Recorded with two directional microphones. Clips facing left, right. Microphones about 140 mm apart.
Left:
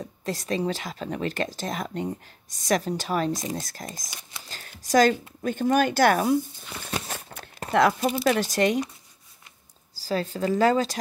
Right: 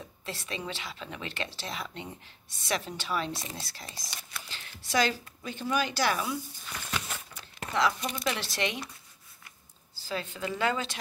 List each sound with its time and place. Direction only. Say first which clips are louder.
0.0 s speech: left 9 dB; 40° left (ahead or behind)
6.9 s a sound: left 5 dB; 40° left (ahead or behind)
8.3 s speech: left 9 dB; 45° left (ahead or behind)
9.9 s speech: left 8 dB; 40° left (ahead or behind)